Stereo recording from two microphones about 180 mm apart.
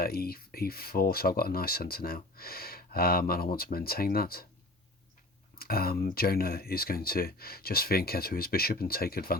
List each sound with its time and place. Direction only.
0.0 s speech: 60° left (ahead or behind)
5.5 s speech: 60° left (ahead or behind)